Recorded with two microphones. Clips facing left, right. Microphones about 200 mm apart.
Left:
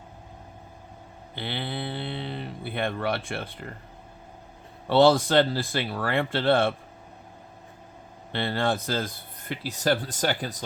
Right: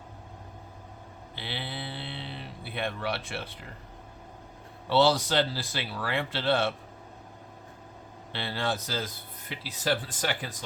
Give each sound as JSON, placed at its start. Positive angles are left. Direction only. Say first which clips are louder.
{"t": 1.4, "sound": "livestock", "louder": "left 6 dB", "side_deg": 50}
{"t": 4.9, "sound": "speech", "louder": "left 5 dB", "side_deg": 50}
{"t": 8.3, "sound": "speech", "louder": "left 5 dB", "side_deg": 50}